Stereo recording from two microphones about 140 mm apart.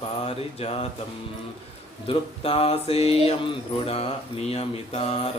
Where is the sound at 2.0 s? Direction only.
40° left (ahead or behind).